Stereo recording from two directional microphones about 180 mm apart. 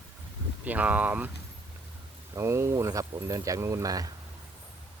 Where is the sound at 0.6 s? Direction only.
10° right (ahead or behind).